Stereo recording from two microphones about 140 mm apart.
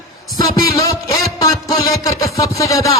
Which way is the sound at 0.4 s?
25° left (ahead or behind).